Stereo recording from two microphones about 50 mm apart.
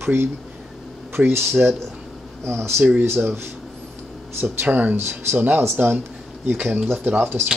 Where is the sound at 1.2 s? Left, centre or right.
Right.